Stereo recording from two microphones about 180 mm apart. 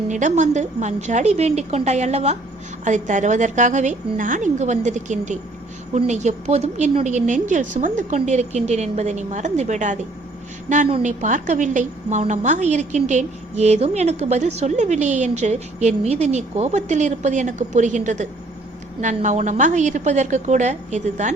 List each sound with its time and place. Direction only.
0.1 s a woman's voice: 45° right (ahead or behind)